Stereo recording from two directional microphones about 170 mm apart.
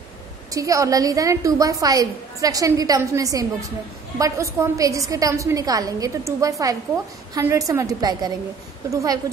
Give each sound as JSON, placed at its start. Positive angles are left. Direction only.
{"t": 0.5, "sound": "a woman's voice", "side_deg": -20}